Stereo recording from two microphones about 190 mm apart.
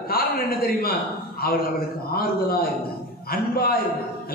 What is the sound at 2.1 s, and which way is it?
A man's voice, 55° left (ahead or behind).